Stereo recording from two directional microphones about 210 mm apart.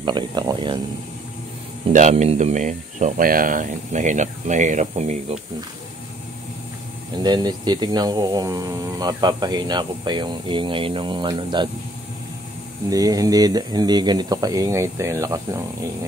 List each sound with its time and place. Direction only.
0.0 s speech: 20° right (ahead or behind)
1.9 s speech: 35° right (ahead or behind)
7.2 s speech: 20° right (ahead or behind)
12.9 s speech: 15° right (ahead or behind)